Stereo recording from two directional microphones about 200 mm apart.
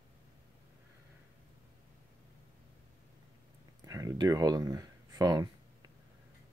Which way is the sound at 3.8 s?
15° right (ahead or behind).